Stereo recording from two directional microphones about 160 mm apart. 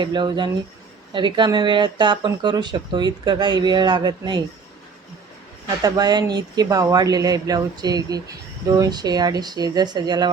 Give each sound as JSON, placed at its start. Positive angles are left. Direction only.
{"t": 0.0, "sound": "speech", "side_deg": -30}
{"t": 5.8, "sound": "speech", "side_deg": -25}